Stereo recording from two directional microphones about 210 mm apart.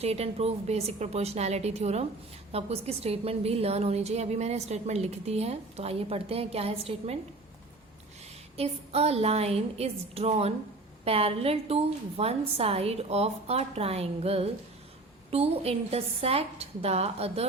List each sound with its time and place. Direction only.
0.0 s a woman's voice: 30° right (ahead or behind)
8.5 s a woman's voice: 30° right (ahead or behind)